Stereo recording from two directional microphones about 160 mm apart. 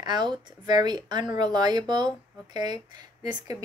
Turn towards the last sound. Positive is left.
turn(degrees=-25)  # may be behind; listen again after turning